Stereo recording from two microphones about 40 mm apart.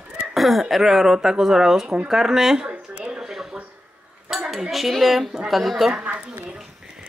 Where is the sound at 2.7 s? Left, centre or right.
Right.